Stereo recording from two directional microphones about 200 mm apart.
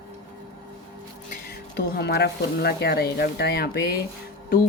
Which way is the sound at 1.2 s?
50° left (ahead or behind).